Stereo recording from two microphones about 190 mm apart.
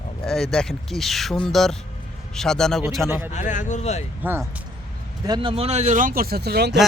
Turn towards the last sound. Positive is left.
turn(degrees=-60)  # may be behind; listen again after turning